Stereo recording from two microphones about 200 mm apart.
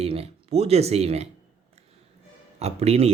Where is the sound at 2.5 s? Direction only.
30° right (ahead or behind).